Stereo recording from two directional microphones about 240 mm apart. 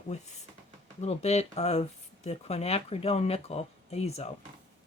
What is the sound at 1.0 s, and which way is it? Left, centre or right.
Speech, left.